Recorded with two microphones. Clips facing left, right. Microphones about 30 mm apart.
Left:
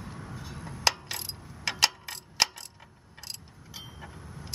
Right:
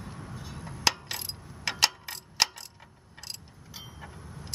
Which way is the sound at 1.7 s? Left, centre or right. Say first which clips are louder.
Even; centre.